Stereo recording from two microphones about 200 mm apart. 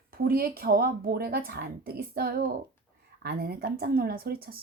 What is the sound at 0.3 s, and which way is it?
Speech, 50° right (ahead or behind).